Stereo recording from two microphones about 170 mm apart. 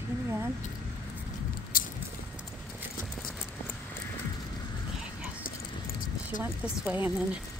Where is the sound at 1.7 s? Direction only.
55° left (ahead or behind).